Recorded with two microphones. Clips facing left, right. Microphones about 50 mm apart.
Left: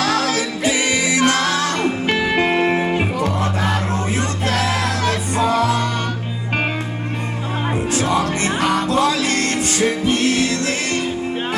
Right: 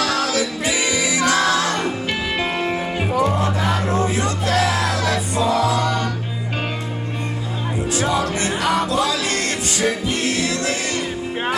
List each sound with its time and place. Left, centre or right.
0.0 s music: left
8.1 s music: left